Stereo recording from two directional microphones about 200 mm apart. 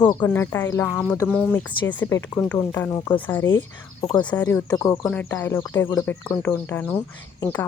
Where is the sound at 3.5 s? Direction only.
20° left (ahead or behind).